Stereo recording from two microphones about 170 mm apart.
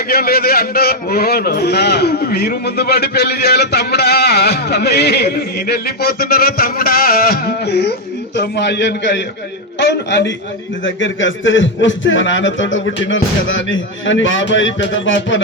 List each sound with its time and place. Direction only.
0.1 s a man's voice: 65° left (ahead or behind); by 15.4 s 90° left